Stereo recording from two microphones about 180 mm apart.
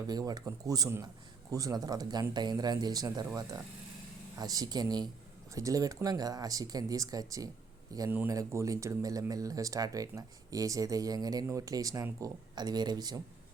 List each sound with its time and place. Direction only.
0.1 s speech: 20° right (ahead or behind)
4.4 s speech: 20° right (ahead or behind)